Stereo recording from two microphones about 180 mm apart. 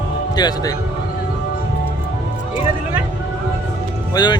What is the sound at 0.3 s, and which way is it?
Speech, 25° left (ahead or behind).